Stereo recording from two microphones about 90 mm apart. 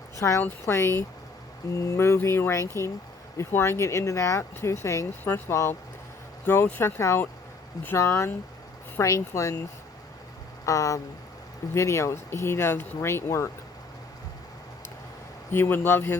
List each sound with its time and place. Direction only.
0.2 s speech: 35° left (ahead or behind)
5.2 s speech: 20° left (ahead or behind)
10.7 s speech: 40° left (ahead or behind)
15.5 s speech: 25° left (ahead or behind)